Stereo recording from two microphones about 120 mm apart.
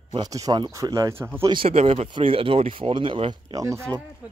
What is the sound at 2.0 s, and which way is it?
Speech, 45° right (ahead or behind).